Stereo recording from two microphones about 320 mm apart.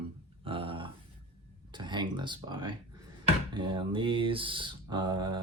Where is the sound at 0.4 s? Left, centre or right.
Centre.